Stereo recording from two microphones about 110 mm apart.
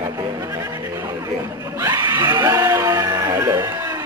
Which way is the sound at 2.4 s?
25° right (ahead or behind).